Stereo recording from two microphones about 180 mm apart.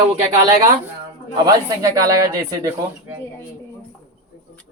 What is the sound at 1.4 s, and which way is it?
Speech, 20° right (ahead or behind).